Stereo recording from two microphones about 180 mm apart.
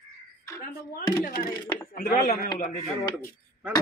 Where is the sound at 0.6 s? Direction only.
55° left (ahead or behind).